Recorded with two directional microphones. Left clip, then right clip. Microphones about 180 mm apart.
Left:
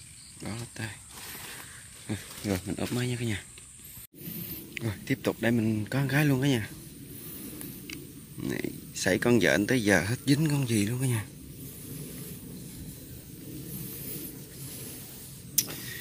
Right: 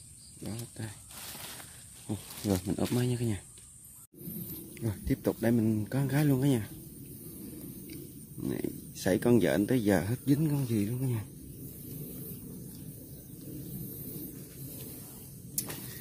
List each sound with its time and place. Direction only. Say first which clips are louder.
0.4 s speech: left 4 dB; 5° right (ahead or behind)
2.0 s speech: even; 20° right (ahead or behind)
4.7 s a man's voice: left 2 dB; 15° right (ahead or behind)
8.5 s speech: left 2 dB; 10° right (ahead or behind)
15.5 s a sound: left 9 dB; 15° right (ahead or behind)